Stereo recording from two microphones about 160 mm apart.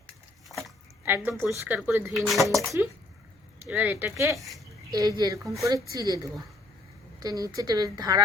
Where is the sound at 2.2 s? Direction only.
Centre (ahead or behind).